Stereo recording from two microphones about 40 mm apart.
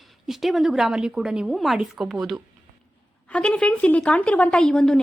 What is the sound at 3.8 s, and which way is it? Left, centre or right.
Speech, left.